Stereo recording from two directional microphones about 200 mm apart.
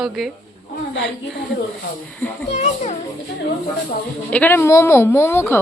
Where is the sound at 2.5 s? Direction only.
35° left (ahead or behind).